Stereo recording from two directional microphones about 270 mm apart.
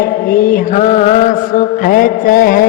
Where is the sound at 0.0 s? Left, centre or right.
Left.